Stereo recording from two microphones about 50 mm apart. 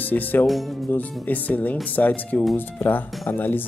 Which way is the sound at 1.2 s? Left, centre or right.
Left.